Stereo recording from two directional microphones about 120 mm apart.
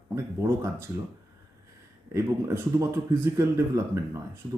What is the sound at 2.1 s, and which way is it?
Speech, 25° right (ahead or behind).